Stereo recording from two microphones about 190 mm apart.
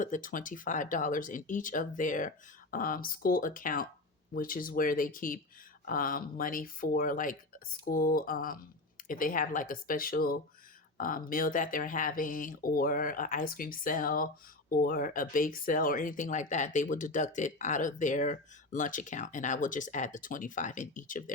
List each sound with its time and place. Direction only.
0.0 s speech: 45° left (ahead or behind)